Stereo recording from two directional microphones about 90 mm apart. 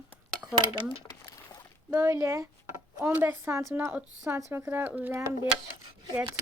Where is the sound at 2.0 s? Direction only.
30° right (ahead or behind).